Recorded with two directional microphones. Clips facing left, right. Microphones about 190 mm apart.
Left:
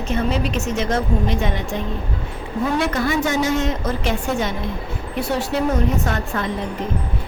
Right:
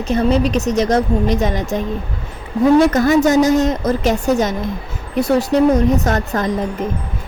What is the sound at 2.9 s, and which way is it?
Speech, 45° right (ahead or behind).